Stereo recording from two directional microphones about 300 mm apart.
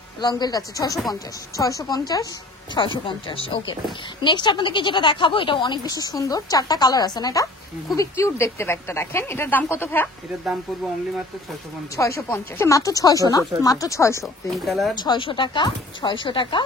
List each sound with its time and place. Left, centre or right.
0.2 s a woman's voice: centre
12.0 s a woman's voice: centre
15.0 s a woman's voice: centre